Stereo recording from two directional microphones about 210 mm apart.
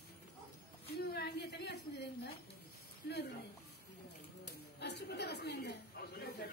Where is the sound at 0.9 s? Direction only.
50° left (ahead or behind).